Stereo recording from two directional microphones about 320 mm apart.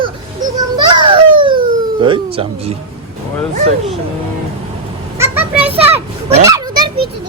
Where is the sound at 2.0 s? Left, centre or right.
Centre.